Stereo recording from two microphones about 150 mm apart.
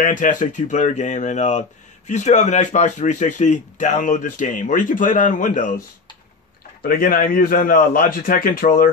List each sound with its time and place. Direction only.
0.0 s speech: 60° left (ahead or behind)
6.8 s a man's voice: 70° left (ahead or behind)